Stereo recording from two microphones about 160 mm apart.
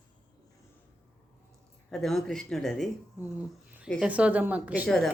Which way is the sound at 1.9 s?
Centre (ahead or behind).